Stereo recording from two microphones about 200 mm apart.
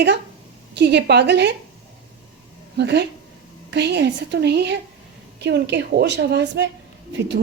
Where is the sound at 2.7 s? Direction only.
55° right (ahead or behind).